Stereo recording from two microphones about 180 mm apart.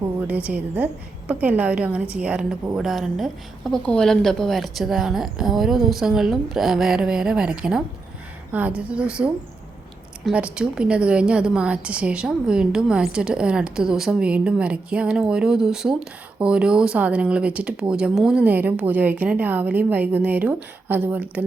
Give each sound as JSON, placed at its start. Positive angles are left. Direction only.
{"t": 0.3, "sound": "a woman's voice", "side_deg": -10}
{"t": 10.2, "sound": "a woman's voice", "side_deg": -5}